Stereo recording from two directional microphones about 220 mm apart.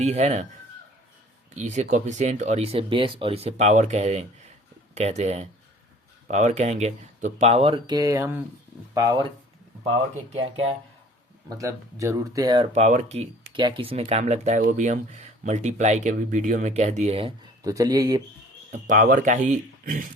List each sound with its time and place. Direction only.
0.0 s speech: 30° right (ahead or behind)
1.5 s speech: 30° right (ahead or behind)
11.5 s speech: 15° right (ahead or behind)
18.7 s speech: 40° right (ahead or behind)